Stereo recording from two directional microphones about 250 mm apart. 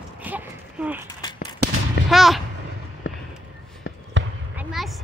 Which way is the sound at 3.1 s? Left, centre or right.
Left.